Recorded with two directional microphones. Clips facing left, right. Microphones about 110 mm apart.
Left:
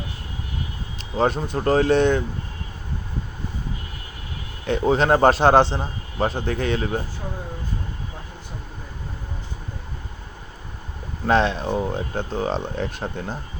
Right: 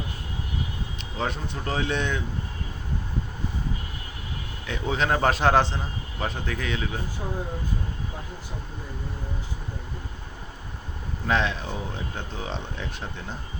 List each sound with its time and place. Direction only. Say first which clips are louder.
1.1 s speech: left 9 dB; 40° left (ahead or behind)
4.6 s a man's voice: left 8 dB; 40° left (ahead or behind)
11.3 s speech: left 6 dB; 35° left (ahead or behind)